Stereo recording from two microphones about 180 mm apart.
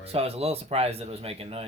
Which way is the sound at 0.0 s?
35° right (ahead or behind).